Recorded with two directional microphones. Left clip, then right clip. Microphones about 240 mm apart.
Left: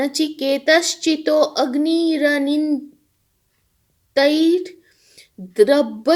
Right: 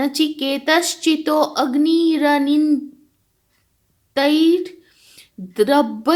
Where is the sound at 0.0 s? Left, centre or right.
Centre.